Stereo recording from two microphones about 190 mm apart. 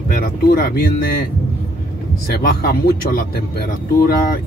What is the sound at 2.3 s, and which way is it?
Speech, 50° left (ahead or behind).